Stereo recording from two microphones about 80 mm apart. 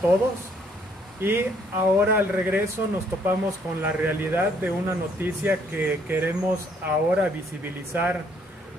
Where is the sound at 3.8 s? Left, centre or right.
Right.